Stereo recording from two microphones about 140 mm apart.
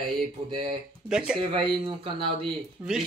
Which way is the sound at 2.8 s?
10° right (ahead or behind).